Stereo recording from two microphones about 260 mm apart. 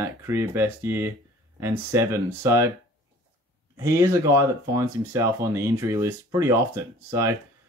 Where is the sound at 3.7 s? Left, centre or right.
Centre.